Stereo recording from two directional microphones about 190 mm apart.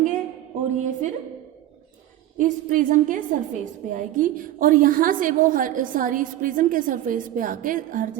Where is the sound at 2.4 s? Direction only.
40° right (ahead or behind).